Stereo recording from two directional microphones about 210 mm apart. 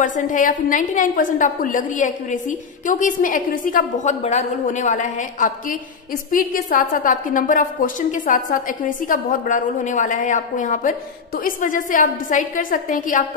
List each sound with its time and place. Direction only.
0.0 s a woman's voice: 40° left (ahead or behind)